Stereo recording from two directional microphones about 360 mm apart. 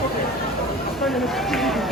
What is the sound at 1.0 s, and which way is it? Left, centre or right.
Run, centre.